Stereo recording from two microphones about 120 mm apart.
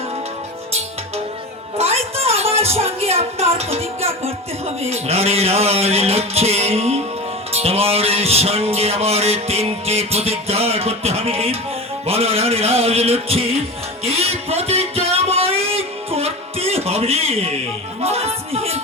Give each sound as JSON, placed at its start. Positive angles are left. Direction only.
{"t": 1.8, "sound": "speech", "side_deg": -55}
{"t": 14.0, "sound": "music", "side_deg": -55}